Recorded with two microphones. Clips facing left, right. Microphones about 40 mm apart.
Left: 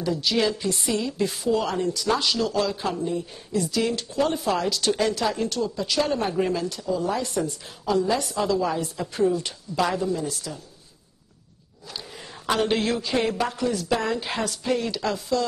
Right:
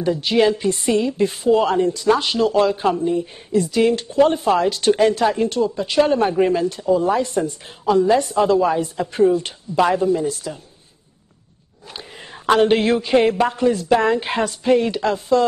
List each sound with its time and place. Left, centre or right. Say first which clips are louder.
0.0 s a woman's voice: right 7 dB; right
12.4 s a woman's voice: right 8 dB; right